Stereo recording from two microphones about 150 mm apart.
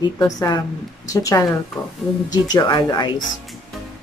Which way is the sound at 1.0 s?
20° left (ahead or behind).